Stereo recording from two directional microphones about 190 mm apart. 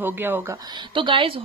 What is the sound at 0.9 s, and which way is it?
Speech, 25° right (ahead or behind).